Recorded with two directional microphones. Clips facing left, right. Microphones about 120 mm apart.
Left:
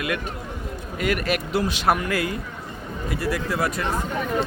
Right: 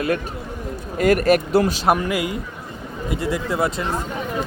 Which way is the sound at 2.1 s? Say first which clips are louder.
Right 2 dB; 20° right (ahead or behind).